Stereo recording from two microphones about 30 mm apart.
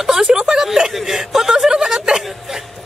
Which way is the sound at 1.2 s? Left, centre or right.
Centre.